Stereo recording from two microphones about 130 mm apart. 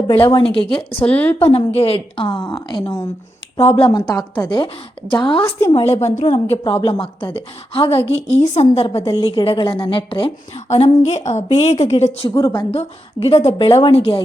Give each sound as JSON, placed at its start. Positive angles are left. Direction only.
{"t": 0.3, "sound": "a woman's voice", "side_deg": 40}
{"t": 1.0, "sound": "a woman's voice", "side_deg": 15}
{"t": 1.5, "sound": "a woman's voice", "side_deg": 50}
{"t": 3.9, "sound": "a woman's voice", "side_deg": 30}
{"t": 5.4, "sound": "a woman's voice", "side_deg": 20}
{"t": 5.7, "sound": "a woman's voice", "side_deg": 55}
{"t": 7.3, "sound": "a woman's voice", "side_deg": 45}
{"t": 12.3, "sound": "a woman's voice", "side_deg": 35}
{"t": 13.2, "sound": "a woman's voice", "side_deg": 55}